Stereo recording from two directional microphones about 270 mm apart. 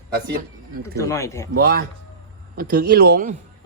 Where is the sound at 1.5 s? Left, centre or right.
Right.